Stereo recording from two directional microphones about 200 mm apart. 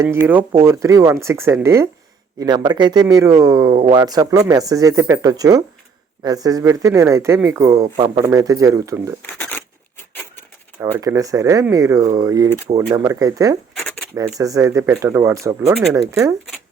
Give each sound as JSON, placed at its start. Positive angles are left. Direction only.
{"t": 0.6, "sound": "speech", "side_deg": -15}
{"t": 9.2, "sound": "a sound", "side_deg": 10}
{"t": 10.8, "sound": "speech", "side_deg": -15}